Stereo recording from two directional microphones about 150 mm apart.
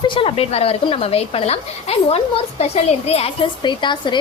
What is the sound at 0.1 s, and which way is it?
Speech, 35° left (ahead or behind).